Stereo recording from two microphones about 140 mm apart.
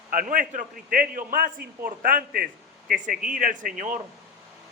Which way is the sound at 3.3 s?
70° right (ahead or behind).